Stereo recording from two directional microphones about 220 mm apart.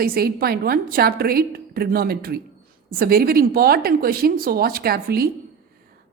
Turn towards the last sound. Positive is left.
turn(degrees=-45)  # may be behind; listen again after turning